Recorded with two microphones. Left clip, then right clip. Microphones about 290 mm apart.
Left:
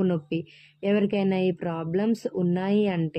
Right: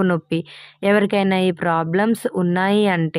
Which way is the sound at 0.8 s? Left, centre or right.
Right.